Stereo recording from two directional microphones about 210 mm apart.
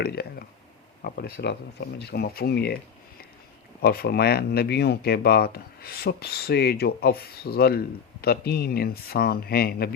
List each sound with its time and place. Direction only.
0.0 s speech: 50° left (ahead or behind)
3.8 s speech: 45° left (ahead or behind)